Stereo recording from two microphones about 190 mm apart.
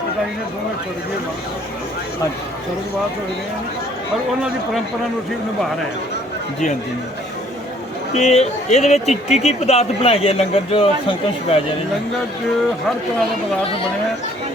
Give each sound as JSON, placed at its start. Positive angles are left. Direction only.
{"t": 8.1, "sound": "speech", "side_deg": 35}